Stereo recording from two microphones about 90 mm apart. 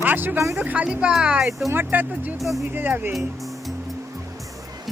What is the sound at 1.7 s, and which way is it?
Speech, 20° right (ahead or behind).